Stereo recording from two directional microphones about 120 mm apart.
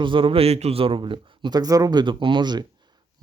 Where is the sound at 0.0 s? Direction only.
45° right (ahead or behind).